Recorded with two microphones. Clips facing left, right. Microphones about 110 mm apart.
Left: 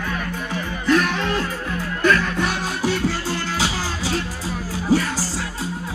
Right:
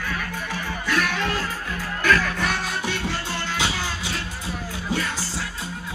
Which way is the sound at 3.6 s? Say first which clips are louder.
Left 3 dB; 35° left (ahead or behind).